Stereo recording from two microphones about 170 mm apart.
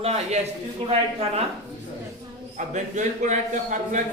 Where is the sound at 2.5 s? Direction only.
45° right (ahead or behind).